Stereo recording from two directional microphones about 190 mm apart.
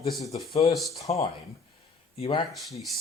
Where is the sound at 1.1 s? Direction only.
35° left (ahead or behind).